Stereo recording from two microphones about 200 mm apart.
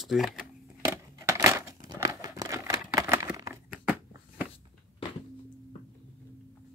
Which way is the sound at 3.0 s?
15° right (ahead or behind).